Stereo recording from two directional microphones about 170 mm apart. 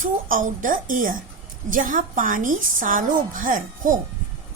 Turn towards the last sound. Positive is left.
turn(degrees=-50)  # may be behind; listen again after turning